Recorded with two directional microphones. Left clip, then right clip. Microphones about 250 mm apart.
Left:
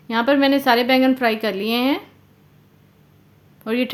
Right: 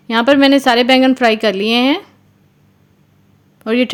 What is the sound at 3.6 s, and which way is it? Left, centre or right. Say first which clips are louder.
Speech: right 7 dB; right.